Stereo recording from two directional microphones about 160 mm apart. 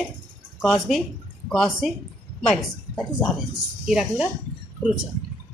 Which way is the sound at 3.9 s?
Centre (ahead or behind).